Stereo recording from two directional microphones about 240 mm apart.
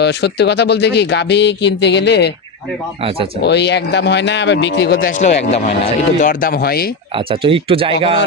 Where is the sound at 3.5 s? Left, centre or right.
Left.